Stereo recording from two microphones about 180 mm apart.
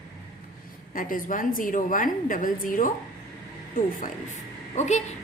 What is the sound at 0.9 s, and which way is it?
A woman's voice, 50° left (ahead or behind).